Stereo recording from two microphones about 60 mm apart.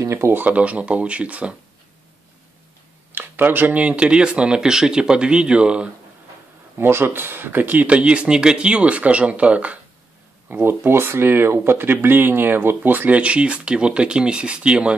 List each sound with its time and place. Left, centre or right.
0.0 s speech: right
0.3 s speech: right
3.1 s a sound: right
3.8 s speech: centre
6.8 s speech: right
10.5 s speech: right; by 15.0 s centre